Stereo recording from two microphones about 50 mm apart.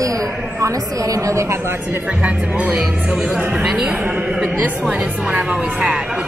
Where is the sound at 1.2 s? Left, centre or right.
Right.